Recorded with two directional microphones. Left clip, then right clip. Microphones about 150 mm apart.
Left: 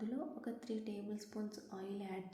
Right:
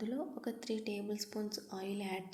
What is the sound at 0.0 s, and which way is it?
A woman's voice, 15° right (ahead or behind).